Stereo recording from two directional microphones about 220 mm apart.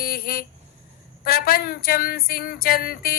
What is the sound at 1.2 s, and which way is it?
Speech, 45° left (ahead or behind).